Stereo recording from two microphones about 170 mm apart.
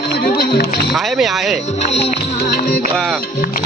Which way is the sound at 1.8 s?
40° left (ahead or behind).